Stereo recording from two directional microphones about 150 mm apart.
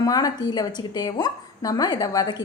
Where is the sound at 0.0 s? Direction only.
25° left (ahead or behind).